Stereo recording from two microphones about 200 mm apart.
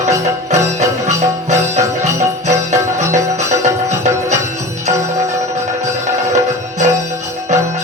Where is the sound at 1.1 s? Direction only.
35° right (ahead or behind).